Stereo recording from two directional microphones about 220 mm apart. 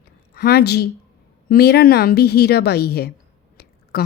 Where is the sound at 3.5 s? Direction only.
45° left (ahead or behind).